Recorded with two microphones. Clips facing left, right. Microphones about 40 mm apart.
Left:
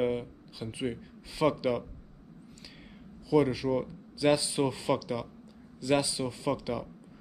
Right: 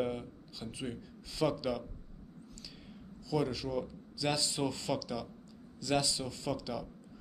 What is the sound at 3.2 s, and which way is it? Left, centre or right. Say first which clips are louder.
Speech: left 8 dB; left.